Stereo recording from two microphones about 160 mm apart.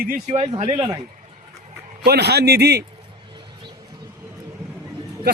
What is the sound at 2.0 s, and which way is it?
Speech, 90° right.